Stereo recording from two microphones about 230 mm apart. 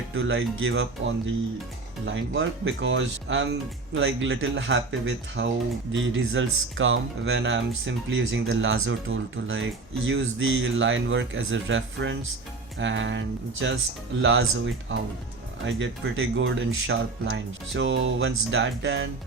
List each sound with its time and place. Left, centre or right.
0.1 s speech: right
15.6 s speech: right